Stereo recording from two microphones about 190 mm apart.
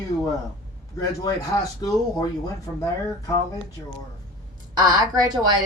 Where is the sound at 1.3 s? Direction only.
20° left (ahead or behind).